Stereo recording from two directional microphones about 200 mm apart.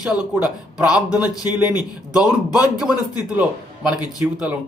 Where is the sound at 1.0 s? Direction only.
20° left (ahead or behind).